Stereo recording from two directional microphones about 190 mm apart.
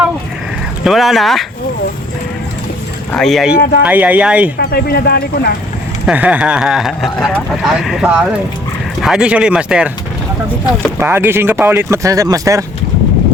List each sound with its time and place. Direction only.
0.9 s speech: centre (ahead or behind)
3.1 s speech: centre (ahead or behind)
3.6 s speech: 55° left (ahead or behind)
3.8 s speech: 10° right (ahead or behind)
4.5 s speech: 55° left (ahead or behind)
6.1 s speech: 5° right (ahead or behind)
11.0 s speech: 10° right (ahead or behind)